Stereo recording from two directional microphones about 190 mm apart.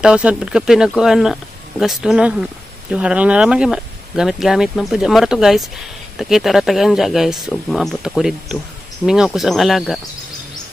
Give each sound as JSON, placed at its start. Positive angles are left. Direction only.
{"t": 0.0, "sound": "speech", "side_deg": -5}